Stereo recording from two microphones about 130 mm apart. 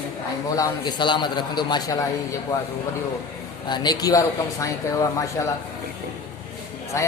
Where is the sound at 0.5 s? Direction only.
30° left (ahead or behind).